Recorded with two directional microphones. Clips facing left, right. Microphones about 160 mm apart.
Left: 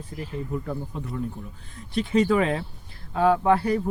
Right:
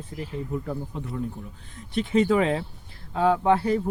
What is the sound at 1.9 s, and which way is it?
Speech, 20° right (ahead or behind).